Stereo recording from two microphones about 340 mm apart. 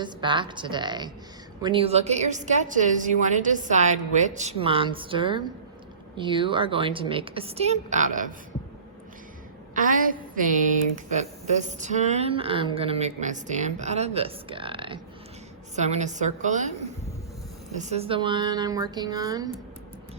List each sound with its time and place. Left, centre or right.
0.0 s a woman's voice: centre
9.7 s a woman's voice: right
17.7 s a woman's voice: centre